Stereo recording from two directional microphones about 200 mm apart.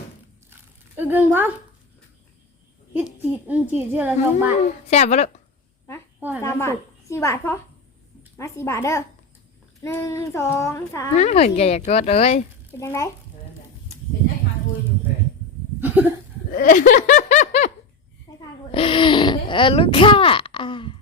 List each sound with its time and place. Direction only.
0.5 s a sound: 10° right (ahead or behind)
2.9 s speech: 10° right (ahead or behind)
4.9 s a woman's voice: 35° left (ahead or behind)
6.1 s a woman's voice: 10° right (ahead or behind)
6.4 s speech: 15° left (ahead or behind)
11.1 s a woman's voice: 35° left (ahead or behind)
12.7 s speech: 15° left (ahead or behind)
15.8 s cough: 10° right (ahead or behind)
16.5 s snicker: 45° left (ahead or behind)
18.3 s a sound: 25° left (ahead or behind)
18.7 s speech: 25° left (ahead or behind)